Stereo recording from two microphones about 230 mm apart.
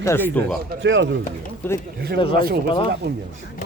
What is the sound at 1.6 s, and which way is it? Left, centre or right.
Speech, centre.